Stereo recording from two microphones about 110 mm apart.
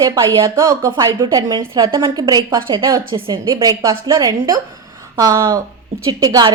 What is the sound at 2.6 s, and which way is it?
Speech, 50° right (ahead or behind).